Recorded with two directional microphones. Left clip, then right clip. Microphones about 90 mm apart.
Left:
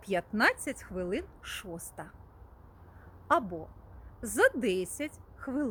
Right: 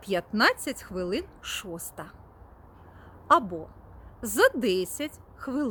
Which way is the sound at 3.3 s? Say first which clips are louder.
Right 6 dB; 30° right (ahead or behind).